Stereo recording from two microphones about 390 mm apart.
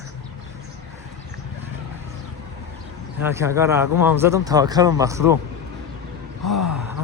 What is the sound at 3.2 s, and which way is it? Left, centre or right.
Speech, centre.